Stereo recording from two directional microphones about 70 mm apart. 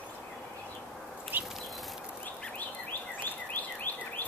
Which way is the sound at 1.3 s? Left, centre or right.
Right.